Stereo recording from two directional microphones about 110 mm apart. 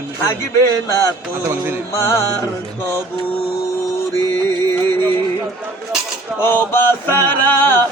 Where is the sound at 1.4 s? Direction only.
15° right (ahead or behind).